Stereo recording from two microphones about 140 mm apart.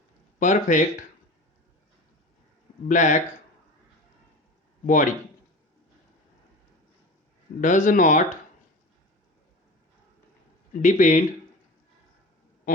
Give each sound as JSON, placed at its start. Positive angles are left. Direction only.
{"t": 0.3, "sound": "speech", "side_deg": 65}
{"t": 2.9, "sound": "speech", "side_deg": 60}
{"t": 4.9, "sound": "speech", "side_deg": 70}
{"t": 7.6, "sound": "speech", "side_deg": 65}
{"t": 10.8, "sound": "speech", "side_deg": 65}